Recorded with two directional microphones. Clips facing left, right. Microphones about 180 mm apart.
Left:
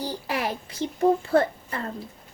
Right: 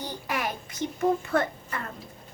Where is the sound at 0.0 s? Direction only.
30° left (ahead or behind).